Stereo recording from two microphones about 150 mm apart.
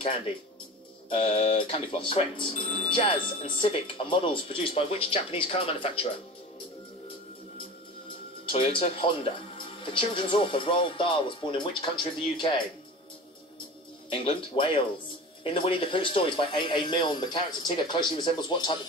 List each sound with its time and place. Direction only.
1.1 s speech: 40° left (ahead or behind)
8.5 s speech: 40° left (ahead or behind)
14.1 s speech: 35° left (ahead or behind)